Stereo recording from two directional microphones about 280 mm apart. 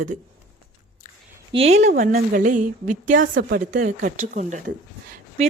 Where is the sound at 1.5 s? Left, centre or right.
Right.